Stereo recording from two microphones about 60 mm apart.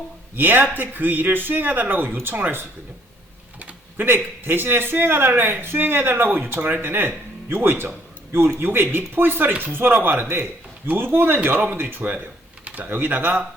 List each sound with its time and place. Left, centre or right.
0.3 s a man's voice: right
12.6 s typing: right
12.9 s a man's voice: right